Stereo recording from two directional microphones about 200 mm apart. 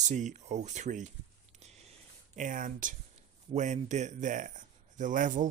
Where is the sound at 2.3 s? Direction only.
40° right (ahead or behind).